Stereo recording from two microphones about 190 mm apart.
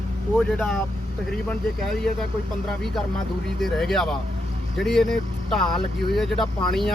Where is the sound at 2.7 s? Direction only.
Centre (ahead or behind).